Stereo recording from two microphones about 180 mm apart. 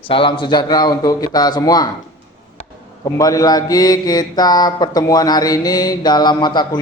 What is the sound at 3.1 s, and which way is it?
Mantra, 20° left (ahead or behind).